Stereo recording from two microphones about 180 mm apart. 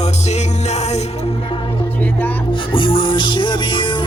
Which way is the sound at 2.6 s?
30° left (ahead or behind).